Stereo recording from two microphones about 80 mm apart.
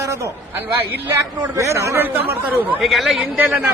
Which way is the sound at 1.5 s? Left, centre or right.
Right.